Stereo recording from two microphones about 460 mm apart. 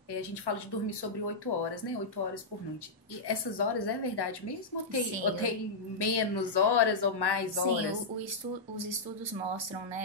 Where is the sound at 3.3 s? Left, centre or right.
Left.